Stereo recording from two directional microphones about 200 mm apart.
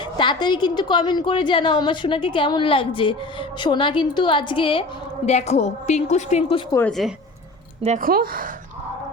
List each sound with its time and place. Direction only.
0.2 s a woman's voice: 25° left (ahead or behind)
6.7 s speech: 5° left (ahead or behind)
7.9 s a woman's voice: 45° right (ahead or behind)